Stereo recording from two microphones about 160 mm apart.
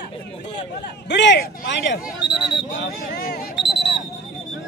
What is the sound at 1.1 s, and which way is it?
Speech, 90° left.